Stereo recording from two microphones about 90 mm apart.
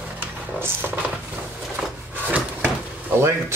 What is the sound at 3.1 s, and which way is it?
Speech, 30° right (ahead or behind).